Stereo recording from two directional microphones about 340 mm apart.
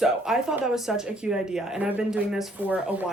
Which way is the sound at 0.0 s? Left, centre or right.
Centre.